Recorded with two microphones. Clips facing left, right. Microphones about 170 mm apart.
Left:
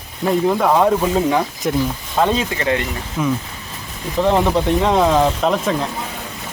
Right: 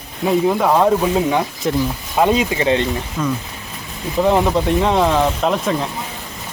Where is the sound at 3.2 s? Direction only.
15° left (ahead or behind).